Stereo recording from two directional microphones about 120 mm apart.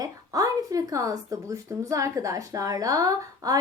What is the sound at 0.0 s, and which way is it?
Speech, 30° right (ahead or behind).